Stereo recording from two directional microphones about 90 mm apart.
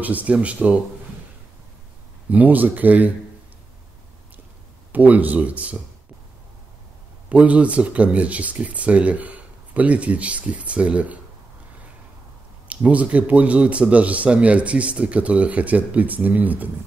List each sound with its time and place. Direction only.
0.0 s speech: 15° right (ahead or behind)
2.3 s speech: 20° right (ahead or behind)
4.9 s speech: 20° right (ahead or behind)
7.2 s speech: 15° right (ahead or behind)
12.6 s speech: 15° right (ahead or behind)